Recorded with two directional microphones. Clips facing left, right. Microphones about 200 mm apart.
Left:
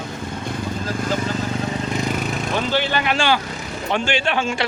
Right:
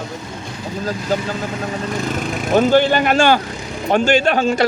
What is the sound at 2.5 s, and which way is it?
Speech, 45° right (ahead or behind).